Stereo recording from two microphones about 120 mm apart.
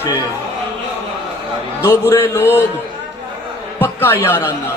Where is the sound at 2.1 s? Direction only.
20° left (ahead or behind).